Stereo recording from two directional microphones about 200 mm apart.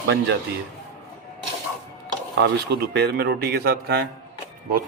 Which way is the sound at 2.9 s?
55° right (ahead or behind).